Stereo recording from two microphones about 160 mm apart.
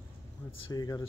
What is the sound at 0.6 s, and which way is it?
Speech, 25° left (ahead or behind).